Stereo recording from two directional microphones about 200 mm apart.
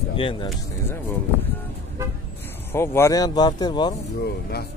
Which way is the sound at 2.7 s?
10° left (ahead or behind).